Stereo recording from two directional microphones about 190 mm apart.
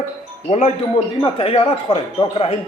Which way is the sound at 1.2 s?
30° left (ahead or behind).